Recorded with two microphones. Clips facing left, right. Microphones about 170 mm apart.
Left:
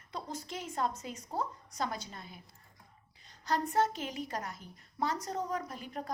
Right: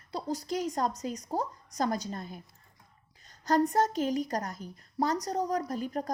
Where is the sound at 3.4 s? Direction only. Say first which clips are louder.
Right 5 dB; 40° right (ahead or behind).